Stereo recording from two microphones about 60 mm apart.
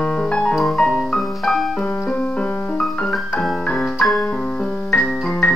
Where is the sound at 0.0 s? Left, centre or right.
Centre.